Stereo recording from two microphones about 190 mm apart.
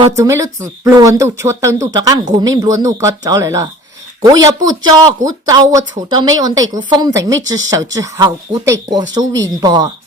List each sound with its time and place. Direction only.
0.2 s speech: 15° right (ahead or behind)